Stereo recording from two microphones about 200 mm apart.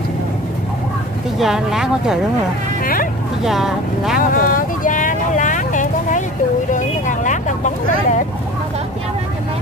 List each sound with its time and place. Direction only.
1.4 s speech: centre (ahead or behind)
2.8 s vehicle: 45° left (ahead or behind)
3.4 s speech: centre (ahead or behind)
4.3 s vehicle: 40° left (ahead or behind)